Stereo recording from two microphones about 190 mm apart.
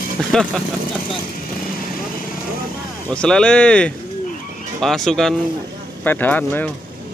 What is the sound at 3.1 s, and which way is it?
Speech, 5° left (ahead or behind).